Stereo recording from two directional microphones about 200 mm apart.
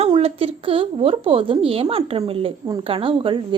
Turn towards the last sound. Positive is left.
turn(degrees=-25)  # may be behind; listen again after turning